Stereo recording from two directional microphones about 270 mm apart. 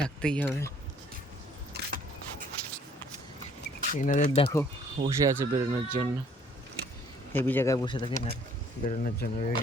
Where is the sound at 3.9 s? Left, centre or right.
Left.